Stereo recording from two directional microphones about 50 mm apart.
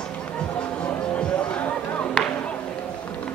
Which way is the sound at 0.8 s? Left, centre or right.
Left.